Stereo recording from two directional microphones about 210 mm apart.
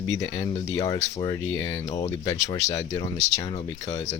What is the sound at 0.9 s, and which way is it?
Speech, 30° left (ahead or behind).